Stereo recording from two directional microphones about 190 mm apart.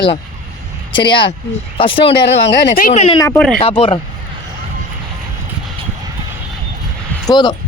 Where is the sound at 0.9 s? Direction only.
25° left (ahead or behind).